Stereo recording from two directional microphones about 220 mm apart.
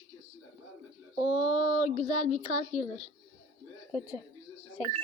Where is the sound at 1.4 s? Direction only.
30° left (ahead or behind).